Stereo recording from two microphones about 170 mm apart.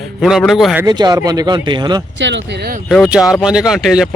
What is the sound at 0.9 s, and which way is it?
A man's voice, 25° right (ahead or behind).